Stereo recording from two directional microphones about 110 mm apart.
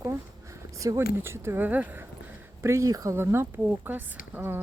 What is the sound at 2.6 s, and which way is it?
Speech, 25° right (ahead or behind).